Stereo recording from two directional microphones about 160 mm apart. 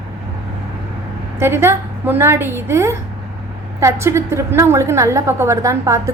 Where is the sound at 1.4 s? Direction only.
15° right (ahead or behind).